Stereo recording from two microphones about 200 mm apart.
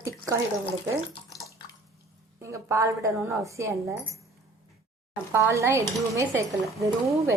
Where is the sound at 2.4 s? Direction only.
15° right (ahead or behind).